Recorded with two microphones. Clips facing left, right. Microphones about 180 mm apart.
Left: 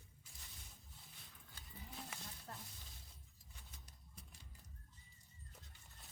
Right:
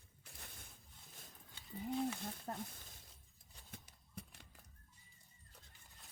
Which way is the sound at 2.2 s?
55° right (ahead or behind).